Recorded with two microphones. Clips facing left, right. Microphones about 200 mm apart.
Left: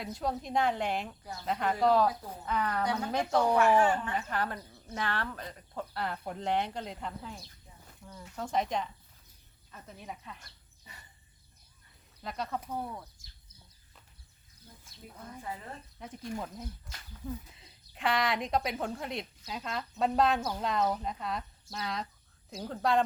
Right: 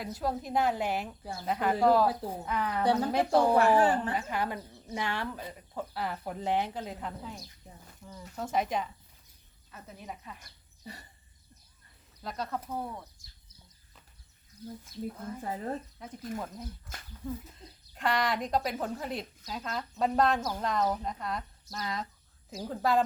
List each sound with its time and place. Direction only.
0.0 s a woman's voice: 5° right (ahead or behind)
2.8 s speech: 30° right (ahead or behind)
4.3 s a woman's voice: 10° right (ahead or behind)
10.8 s speech: 40° right (ahead or behind)
12.2 s a woman's voice: centre (ahead or behind)
15.4 s speech: 45° right (ahead or behind)
16.0 s a woman's voice: centre (ahead or behind)
17.9 s a woman's voice: centre (ahead or behind)